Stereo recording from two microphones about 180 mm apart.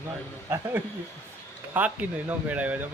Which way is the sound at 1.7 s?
10° right (ahead or behind).